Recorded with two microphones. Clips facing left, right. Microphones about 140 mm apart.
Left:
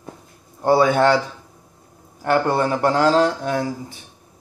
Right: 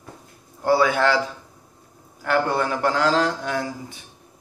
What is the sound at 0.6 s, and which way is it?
Speech, 25° left (ahead or behind).